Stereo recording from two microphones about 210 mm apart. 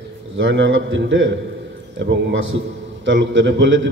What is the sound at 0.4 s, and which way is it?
A man's voice, 60° right (ahead or behind).